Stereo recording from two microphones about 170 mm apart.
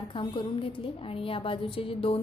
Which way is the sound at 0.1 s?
30° left (ahead or behind).